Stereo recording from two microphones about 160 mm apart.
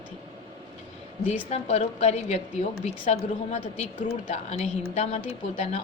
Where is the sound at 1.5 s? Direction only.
45° left (ahead or behind).